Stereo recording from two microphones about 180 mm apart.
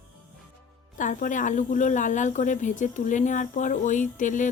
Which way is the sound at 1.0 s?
45° left (ahead or behind).